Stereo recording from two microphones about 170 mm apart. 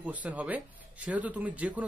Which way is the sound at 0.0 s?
10° right (ahead or behind).